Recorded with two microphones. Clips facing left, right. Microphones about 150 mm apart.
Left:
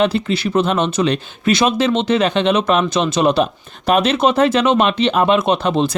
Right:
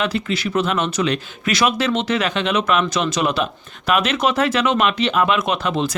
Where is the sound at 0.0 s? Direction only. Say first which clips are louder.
Left 5 dB; 30° left (ahead or behind).